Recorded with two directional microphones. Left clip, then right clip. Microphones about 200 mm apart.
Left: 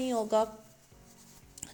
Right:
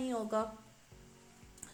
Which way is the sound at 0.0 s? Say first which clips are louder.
Left 7 dB; 35° left (ahead or behind).